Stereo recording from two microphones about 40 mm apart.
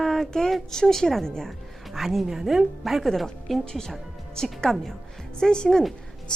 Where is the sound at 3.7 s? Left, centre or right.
Centre.